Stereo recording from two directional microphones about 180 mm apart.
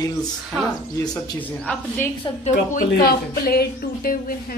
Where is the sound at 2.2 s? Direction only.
40° left (ahead or behind).